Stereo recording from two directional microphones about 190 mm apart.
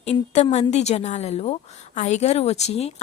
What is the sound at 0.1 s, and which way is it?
A woman's voice, 35° left (ahead or behind).